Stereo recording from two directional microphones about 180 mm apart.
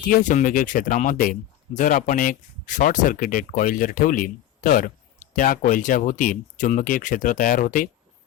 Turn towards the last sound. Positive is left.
turn(degrees=45)  # may be behind; listen again after turning